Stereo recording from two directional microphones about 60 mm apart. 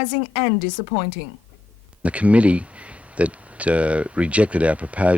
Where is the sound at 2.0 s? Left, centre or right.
Right.